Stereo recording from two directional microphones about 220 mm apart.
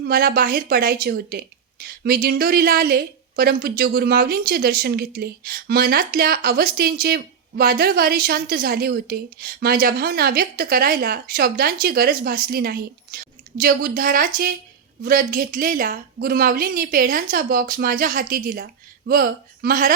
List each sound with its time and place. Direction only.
0.0 s a woman's voice: 45° right (ahead or behind)